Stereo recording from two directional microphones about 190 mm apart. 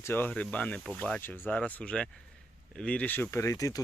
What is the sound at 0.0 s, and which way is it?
Speech, 10° left (ahead or behind).